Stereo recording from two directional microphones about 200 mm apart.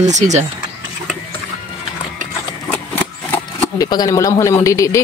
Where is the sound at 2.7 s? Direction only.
10° left (ahead or behind).